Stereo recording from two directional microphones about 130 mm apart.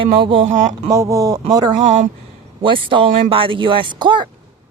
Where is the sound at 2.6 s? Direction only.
40° right (ahead or behind).